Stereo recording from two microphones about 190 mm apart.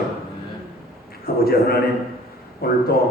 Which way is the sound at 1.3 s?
55° left (ahead or behind).